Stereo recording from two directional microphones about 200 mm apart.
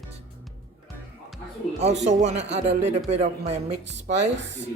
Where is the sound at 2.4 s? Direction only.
60° right (ahead or behind).